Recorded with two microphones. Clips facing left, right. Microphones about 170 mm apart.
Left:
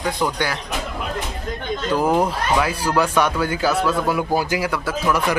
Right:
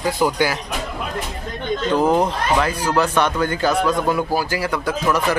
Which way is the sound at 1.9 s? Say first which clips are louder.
Right 1 dB; 10° left (ahead or behind).